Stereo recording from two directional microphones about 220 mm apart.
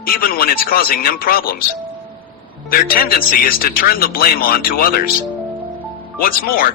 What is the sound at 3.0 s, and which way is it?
Speech, 40° left (ahead or behind).